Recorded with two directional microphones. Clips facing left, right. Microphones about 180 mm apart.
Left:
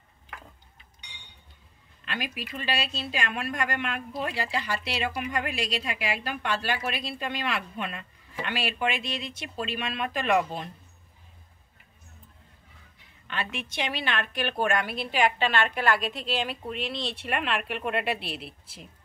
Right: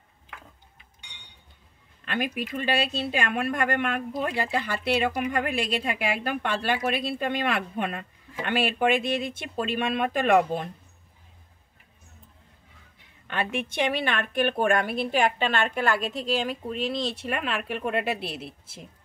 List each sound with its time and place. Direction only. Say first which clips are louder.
2.0 s a woman's voice: right 6 dB; 50° right (ahead or behind)
13.3 s a woman's voice: right 5 dB; 50° right (ahead or behind)